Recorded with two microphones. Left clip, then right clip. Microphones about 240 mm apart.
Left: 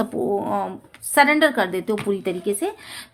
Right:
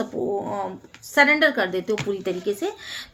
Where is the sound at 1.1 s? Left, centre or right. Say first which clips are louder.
Left 1 dB; left.